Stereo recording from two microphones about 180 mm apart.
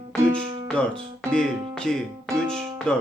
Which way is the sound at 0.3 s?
30° right (ahead or behind).